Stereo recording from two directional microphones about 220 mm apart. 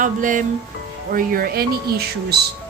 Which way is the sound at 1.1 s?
40° right (ahead or behind).